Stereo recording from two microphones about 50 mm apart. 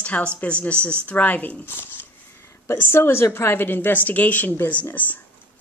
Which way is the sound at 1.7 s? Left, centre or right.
Left.